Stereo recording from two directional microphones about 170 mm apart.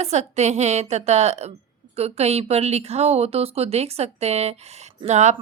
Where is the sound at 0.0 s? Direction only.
40° right (ahead or behind).